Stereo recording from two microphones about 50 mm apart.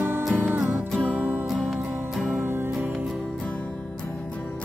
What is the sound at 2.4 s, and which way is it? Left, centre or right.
Music, right.